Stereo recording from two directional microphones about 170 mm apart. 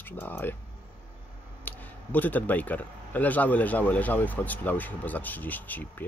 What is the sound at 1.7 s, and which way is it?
Speech, 10° left (ahead or behind).